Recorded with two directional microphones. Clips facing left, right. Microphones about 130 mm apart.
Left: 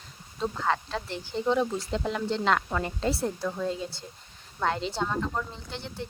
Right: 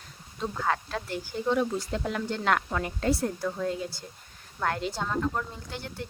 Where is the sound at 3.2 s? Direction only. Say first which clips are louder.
Even; 25° left (ahead or behind).